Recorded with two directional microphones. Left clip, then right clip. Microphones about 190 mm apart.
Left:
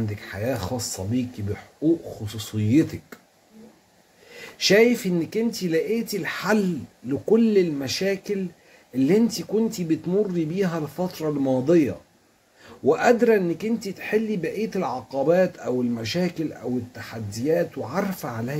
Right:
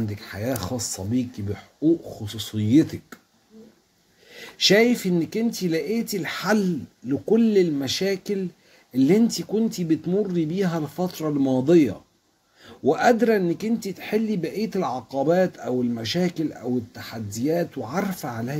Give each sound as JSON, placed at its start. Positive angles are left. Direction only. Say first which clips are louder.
{"t": 0.1, "sound": "speech", "louder": "left 1 dB", "side_deg": -20}
{"t": 4.3, "sound": "speech", "louder": "right 1 dB", "side_deg": -20}
{"t": 12.6, "sound": "speech", "louder": "even", "side_deg": -15}